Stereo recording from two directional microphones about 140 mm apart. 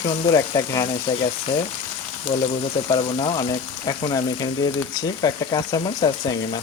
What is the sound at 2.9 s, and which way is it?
Speech, 35° left (ahead or behind).